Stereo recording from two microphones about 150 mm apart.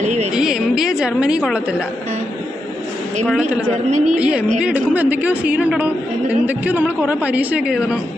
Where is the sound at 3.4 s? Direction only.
10° right (ahead or behind).